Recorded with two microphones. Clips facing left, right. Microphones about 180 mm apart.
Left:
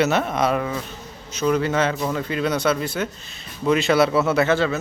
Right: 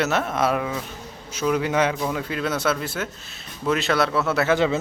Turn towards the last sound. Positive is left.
turn(degrees=-20)  # may be behind; listen again after turning